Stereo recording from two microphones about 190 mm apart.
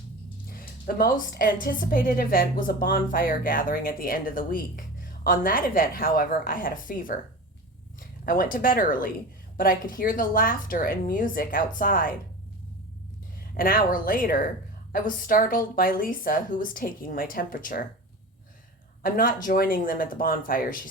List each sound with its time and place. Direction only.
0.5 s a woman's voice: 50° left (ahead or behind)
8.2 s a woman's voice: 45° left (ahead or behind)
13.5 s a woman's voice: 50° left (ahead or behind)
19.0 s a woman's voice: 50° left (ahead or behind)